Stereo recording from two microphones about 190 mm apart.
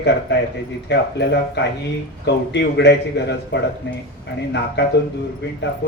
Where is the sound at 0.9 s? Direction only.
65° left (ahead or behind).